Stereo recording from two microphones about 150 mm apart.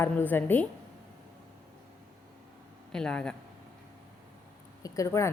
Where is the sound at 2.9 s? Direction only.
5° left (ahead or behind).